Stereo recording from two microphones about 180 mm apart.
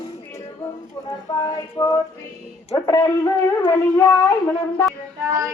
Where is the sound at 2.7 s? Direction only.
15° left (ahead or behind).